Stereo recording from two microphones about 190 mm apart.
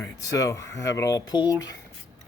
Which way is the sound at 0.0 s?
20° left (ahead or behind).